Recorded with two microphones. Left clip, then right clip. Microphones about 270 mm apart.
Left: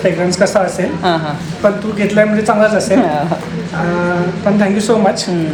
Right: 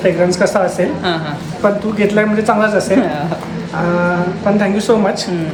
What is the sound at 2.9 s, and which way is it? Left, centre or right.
Speech, centre.